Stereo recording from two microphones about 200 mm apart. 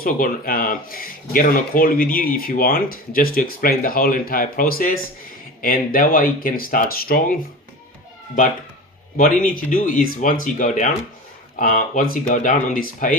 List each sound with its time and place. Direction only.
0.0 s speech: 45° left (ahead or behind)
9.1 s speech: 40° left (ahead or behind)